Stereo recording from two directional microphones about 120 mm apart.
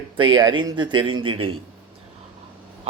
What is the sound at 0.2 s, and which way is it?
A man's voice, 40° right (ahead or behind).